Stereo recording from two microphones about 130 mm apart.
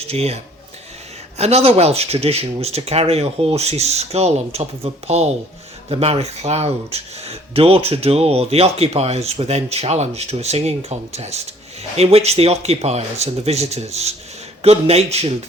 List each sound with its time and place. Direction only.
0.1 s speech: 50° right (ahead or behind)
1.4 s speech: 55° right (ahead or behind)